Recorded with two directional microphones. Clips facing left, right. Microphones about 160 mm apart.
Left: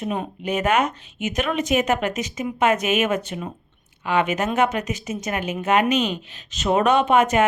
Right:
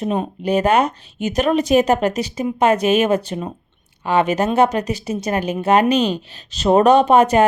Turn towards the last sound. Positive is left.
turn(degrees=-35)  # may be behind; listen again after turning